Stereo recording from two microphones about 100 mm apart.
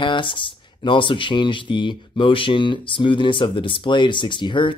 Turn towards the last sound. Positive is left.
turn(degrees=55)  # may be behind; listen again after turning